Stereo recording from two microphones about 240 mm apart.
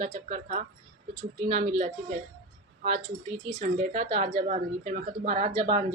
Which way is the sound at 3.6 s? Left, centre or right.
Right.